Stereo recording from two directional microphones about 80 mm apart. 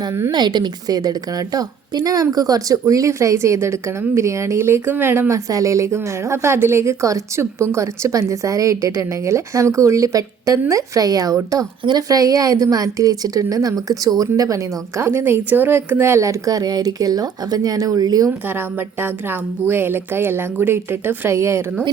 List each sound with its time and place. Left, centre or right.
0.3 s a woman's voice: right
5.3 s a woman's voice: right
15.0 s speech: right
18.3 s a woman's voice: right